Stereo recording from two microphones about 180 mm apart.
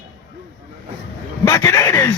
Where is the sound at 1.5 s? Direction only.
15° left (ahead or behind).